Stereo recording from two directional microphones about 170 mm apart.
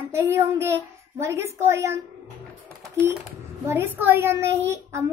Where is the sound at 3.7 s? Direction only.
15° right (ahead or behind).